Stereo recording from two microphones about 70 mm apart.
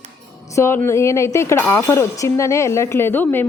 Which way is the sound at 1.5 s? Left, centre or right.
Left.